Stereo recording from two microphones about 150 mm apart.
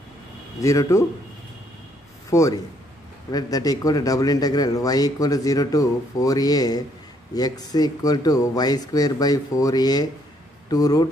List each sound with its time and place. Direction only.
0.6 s a man's voice: 20° left (ahead or behind)
2.3 s a man's voice: 20° left (ahead or behind)